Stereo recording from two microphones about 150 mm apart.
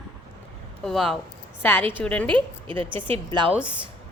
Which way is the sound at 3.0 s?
35° right (ahead or behind).